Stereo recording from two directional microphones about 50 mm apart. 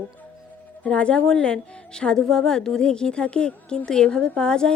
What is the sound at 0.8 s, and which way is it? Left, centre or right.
A woman's voice, left.